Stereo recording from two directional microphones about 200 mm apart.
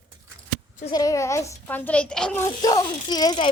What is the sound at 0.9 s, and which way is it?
A child's voice, 15° left (ahead or behind).